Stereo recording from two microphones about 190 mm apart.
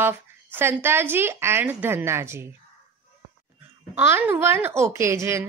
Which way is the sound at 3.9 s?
10° right (ahead or behind).